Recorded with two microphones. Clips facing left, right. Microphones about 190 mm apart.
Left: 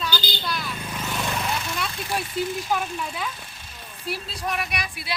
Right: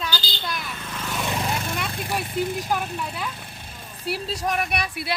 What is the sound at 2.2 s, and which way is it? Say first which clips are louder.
Speech: right 1 dB; 55° right (ahead or behind).